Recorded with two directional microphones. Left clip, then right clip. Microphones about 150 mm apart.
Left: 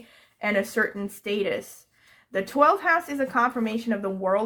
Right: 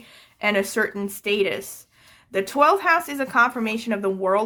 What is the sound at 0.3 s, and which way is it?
Speech, 30° right (ahead or behind).